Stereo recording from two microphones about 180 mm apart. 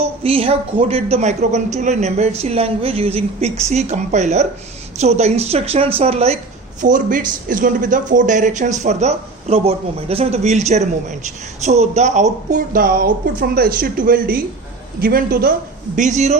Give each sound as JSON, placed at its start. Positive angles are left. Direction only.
{"t": 0.0, "sound": "a woman's voice", "side_deg": -30}
{"t": 6.8, "sound": "a man's voice", "side_deg": -45}
{"t": 16.0, "sound": "a woman's voice", "side_deg": -40}